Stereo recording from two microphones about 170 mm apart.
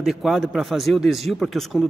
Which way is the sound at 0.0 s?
Centre (ahead or behind).